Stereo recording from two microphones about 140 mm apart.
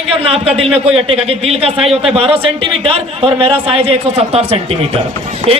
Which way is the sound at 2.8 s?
40° right (ahead or behind).